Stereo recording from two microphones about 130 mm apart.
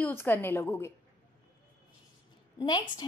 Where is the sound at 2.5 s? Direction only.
35° left (ahead or behind).